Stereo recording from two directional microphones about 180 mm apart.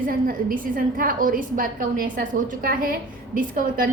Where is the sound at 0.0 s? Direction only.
50° right (ahead or behind).